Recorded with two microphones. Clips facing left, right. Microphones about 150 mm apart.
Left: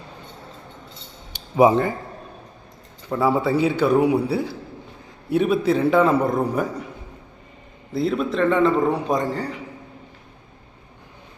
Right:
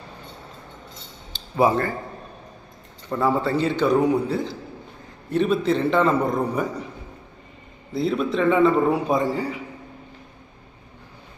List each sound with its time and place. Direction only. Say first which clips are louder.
1.3 s cutlery: left 4 dB; 15° left (ahead or behind)
3.1 s a man's voice: left 2 dB; 5° left (ahead or behind)
7.9 s a man's voice: left 1 dB; centre (ahead or behind)